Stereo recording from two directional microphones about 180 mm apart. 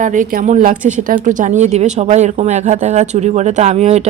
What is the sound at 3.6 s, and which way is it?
Speech, 35° right (ahead or behind).